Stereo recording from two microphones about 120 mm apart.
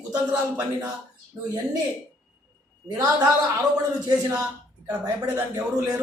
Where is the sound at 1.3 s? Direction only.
25° right (ahead or behind).